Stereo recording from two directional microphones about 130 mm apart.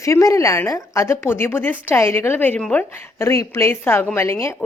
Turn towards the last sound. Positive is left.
turn(degrees=20)  # may be behind; listen again after turning